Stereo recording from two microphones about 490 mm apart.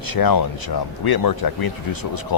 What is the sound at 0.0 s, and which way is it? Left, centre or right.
Speech, left.